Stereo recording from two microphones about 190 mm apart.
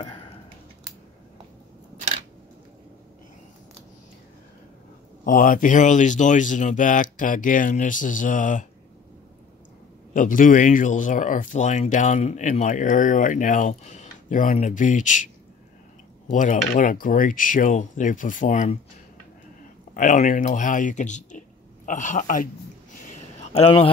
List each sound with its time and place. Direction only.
5.2 s speech: 45° left (ahead or behind)
10.1 s speech: 45° left (ahead or behind)
16.3 s speech: 40° left (ahead or behind)
19.9 s speech: 40° left (ahead or behind)
22.9 s a sound: 40° left (ahead or behind)